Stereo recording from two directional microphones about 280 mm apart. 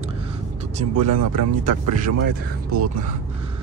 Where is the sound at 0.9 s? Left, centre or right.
Right.